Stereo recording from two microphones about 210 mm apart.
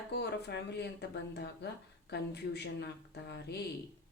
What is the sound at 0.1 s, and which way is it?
Speech, 55° left (ahead or behind).